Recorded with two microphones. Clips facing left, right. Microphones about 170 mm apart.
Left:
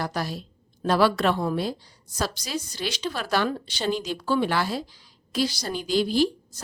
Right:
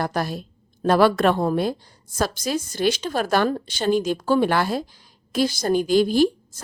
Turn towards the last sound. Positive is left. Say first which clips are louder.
# right 4 dB
turn(degrees=-50)  # may be behind; listen again after turning